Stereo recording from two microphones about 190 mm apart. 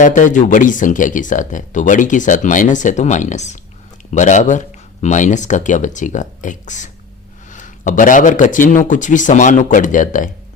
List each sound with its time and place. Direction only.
0.0 s speech: 40° left (ahead or behind)